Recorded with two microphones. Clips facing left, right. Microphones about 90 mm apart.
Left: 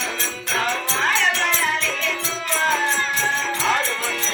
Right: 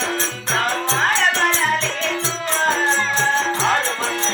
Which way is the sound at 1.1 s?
45° right (ahead or behind).